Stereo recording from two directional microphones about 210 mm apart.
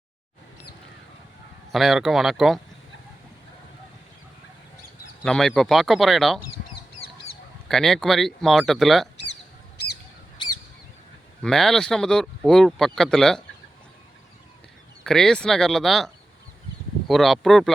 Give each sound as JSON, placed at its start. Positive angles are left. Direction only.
{"t": 1.7, "sound": "speech", "side_deg": 0}
{"t": 5.2, "sound": "speech", "side_deg": 0}
{"t": 7.7, "sound": "speech", "side_deg": 0}
{"t": 10.4, "sound": "a sound", "side_deg": 20}
{"t": 11.4, "sound": "speech", "side_deg": 0}
{"t": 15.0, "sound": "speech", "side_deg": 5}